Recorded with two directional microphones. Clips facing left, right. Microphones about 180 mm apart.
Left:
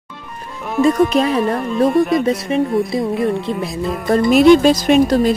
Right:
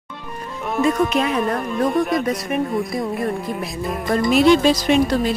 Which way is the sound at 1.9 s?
Centre (ahead or behind).